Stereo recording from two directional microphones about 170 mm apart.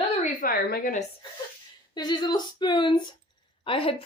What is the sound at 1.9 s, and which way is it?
Speech, 25° left (ahead or behind).